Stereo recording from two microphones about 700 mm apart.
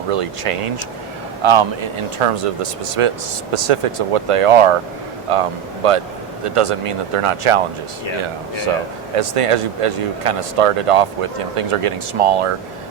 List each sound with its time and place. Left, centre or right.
0.1 s speech: right
9.1 s speech: right